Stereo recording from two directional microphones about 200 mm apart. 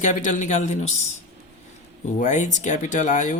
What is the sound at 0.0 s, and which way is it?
Speech, 40° left (ahead or behind).